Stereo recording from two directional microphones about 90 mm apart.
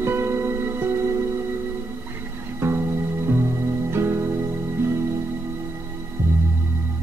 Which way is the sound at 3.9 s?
25° right (ahead or behind).